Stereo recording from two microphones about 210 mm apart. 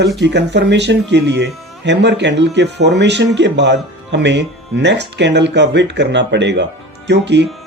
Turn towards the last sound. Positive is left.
turn(degrees=-55)  # may be behind; listen again after turning